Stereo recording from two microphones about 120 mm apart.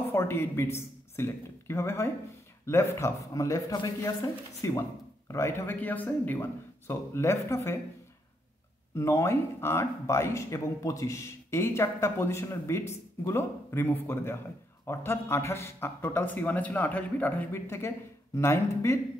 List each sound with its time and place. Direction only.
0.1 s speech: 20° left (ahead or behind)
8.9 s speech: 25° left (ahead or behind)